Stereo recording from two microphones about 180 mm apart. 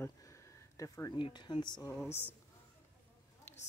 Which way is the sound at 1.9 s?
15° left (ahead or behind).